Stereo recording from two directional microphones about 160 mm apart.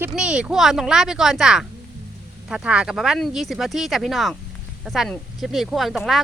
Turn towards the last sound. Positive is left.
turn(degrees=0)  # may be behind; listen again after turning